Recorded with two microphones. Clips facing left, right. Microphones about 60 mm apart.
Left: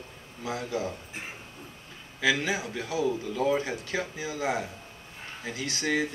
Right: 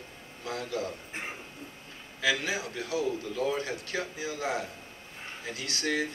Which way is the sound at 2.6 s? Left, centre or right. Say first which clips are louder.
Left 2 dB; centre.